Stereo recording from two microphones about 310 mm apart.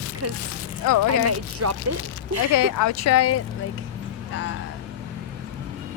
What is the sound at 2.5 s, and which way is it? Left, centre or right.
Speech, left.